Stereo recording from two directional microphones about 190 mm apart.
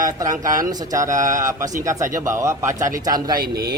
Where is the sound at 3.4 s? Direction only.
50° right (ahead or behind).